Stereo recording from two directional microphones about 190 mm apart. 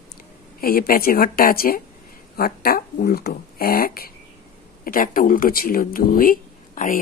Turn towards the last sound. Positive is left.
turn(degrees=45)  # may be behind; listen again after turning